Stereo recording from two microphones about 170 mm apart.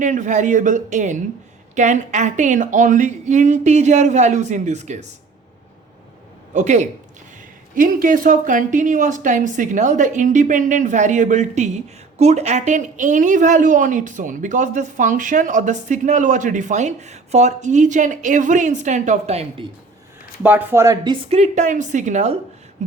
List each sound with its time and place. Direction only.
0.0 s a woman's voice: 45° right (ahead or behind)
6.5 s a woman's voice: 45° right (ahead or behind)
20.4 s a woman's voice: 10° right (ahead or behind); by 22.4 s 45° right (ahead or behind)